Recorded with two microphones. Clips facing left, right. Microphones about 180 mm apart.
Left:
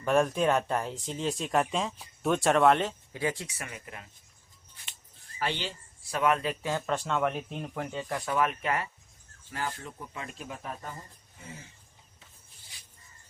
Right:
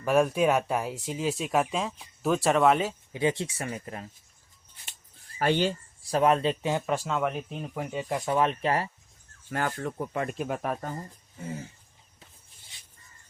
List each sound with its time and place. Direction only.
0.0 s speech: 5° right (ahead or behind)
3.1 s speech: 20° right (ahead or behind)
5.4 s speech: 45° right (ahead or behind); by 8.0 s 10° right (ahead or behind)
8.0 s speech: 20° right (ahead or behind)
9.5 s speech: 60° right (ahead or behind)